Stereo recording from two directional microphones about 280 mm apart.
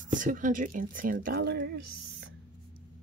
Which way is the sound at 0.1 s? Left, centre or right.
Right.